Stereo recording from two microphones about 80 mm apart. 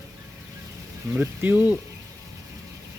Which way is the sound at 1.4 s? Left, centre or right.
Right.